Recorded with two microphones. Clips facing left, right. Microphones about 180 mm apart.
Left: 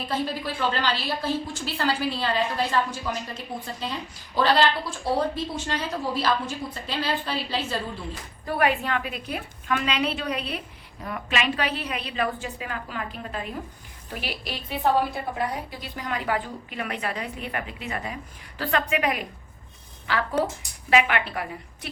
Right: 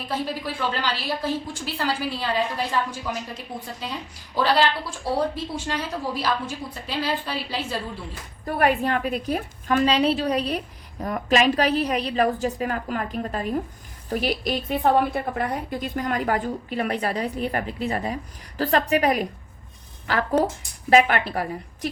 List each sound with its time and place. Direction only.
0.1 s a woman's voice: 10° right (ahead or behind)
8.5 s a woman's voice: 45° right (ahead or behind)
20.9 s a woman's voice: 40° right (ahead or behind)